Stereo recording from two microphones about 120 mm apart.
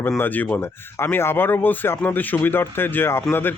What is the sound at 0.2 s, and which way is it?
Speech, 15° left (ahead or behind).